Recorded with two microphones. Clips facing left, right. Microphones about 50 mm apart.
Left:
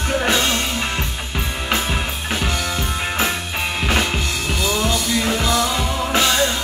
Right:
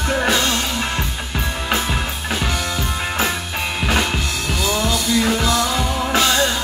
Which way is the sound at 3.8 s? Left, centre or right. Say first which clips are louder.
Right 1 dB; centre.